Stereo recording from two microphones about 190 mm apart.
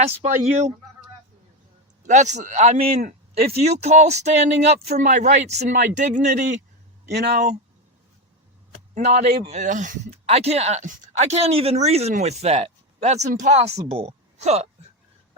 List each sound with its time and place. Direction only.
0.0 s speech: 35° right (ahead or behind)
2.0 s speech: 40° right (ahead or behind)
2.9 s speech: 50° right (ahead or behind)
3.5 s speech: 35° right (ahead or behind)
7.1 s speech: 60° right (ahead or behind)
9.0 s speech: 35° right (ahead or behind)